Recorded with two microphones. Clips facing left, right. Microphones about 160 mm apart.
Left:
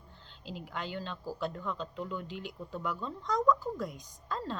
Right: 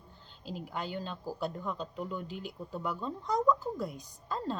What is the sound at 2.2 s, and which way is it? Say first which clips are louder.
Speech: right 1 dB; 40° right (ahead or behind).